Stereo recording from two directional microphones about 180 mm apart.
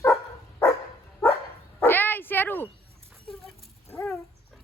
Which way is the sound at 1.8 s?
10° left (ahead or behind).